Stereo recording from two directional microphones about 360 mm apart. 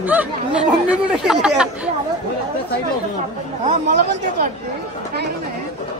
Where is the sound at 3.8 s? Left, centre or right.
Right.